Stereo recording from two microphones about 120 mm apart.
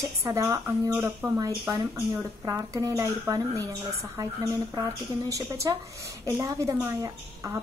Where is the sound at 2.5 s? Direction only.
25° right (ahead or behind).